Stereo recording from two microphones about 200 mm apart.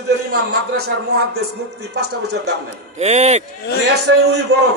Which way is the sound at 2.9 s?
35° right (ahead or behind).